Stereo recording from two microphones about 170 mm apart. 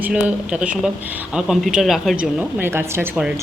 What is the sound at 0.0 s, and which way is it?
A woman's voice, 10° right (ahead or behind).